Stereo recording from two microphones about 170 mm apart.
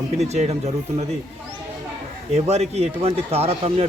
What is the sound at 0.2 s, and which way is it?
Speech, 40° right (ahead or behind).